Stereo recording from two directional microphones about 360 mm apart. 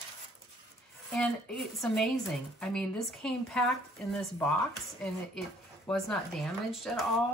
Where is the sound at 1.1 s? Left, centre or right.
Centre.